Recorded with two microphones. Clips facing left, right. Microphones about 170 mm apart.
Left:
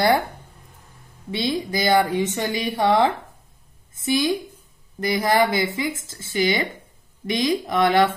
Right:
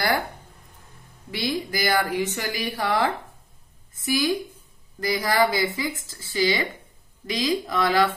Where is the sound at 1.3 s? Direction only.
20° left (ahead or behind).